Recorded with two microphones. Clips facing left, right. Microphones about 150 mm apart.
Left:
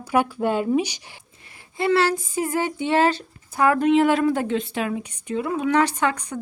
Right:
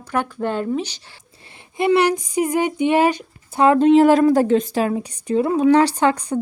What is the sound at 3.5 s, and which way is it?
A woman's voice, 25° right (ahead or behind).